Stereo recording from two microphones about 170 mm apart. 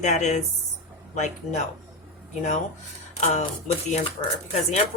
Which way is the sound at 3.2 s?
45° left (ahead or behind).